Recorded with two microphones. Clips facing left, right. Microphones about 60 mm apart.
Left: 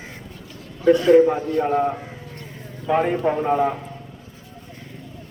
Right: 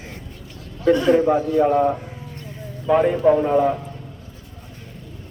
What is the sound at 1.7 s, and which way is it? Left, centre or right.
Speech, centre.